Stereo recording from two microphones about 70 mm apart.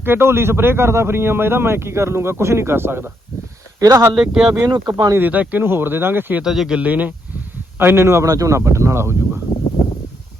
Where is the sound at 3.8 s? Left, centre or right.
Right.